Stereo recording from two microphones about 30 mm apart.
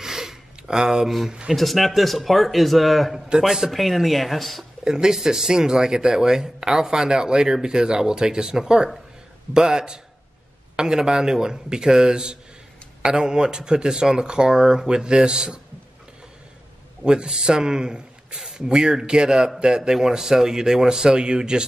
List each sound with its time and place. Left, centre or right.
0.0 s a sound: centre
1.0 s speech: centre
3.3 s speech: centre
3.7 s speech: centre
4.8 s a man's voice: right
17.0 s speech: right